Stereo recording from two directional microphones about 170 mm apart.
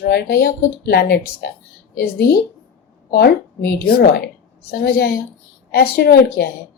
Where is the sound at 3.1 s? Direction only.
70° left (ahead or behind).